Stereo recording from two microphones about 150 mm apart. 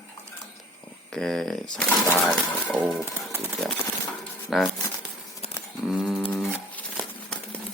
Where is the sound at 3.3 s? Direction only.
15° right (ahead or behind).